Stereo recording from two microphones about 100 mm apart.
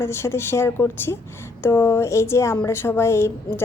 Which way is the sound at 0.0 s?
25° left (ahead or behind).